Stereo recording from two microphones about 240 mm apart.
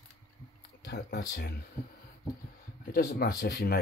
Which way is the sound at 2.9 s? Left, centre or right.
Left.